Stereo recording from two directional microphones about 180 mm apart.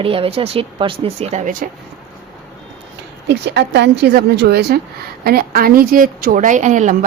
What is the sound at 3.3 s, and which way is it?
A woman's voice, 70° right (ahead or behind).